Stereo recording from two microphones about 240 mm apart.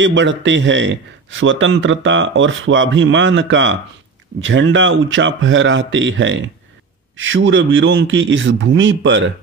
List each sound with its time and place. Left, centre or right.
0.0 s a man's voice: right